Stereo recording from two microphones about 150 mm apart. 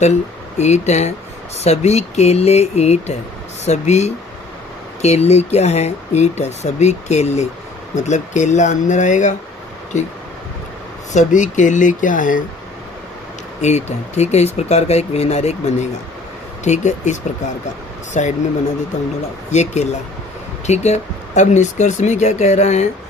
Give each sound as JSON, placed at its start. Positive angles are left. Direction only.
{"t": 0.6, "sound": "speech", "side_deg": 50}
{"t": 11.1, "sound": "speech", "side_deg": 55}
{"t": 13.6, "sound": "speech", "side_deg": 50}
{"t": 18.2, "sound": "speech", "side_deg": 55}
{"t": 19.5, "sound": "speech", "side_deg": 50}